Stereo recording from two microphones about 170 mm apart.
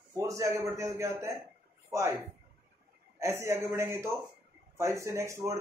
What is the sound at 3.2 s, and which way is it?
Speech, 15° right (ahead or behind).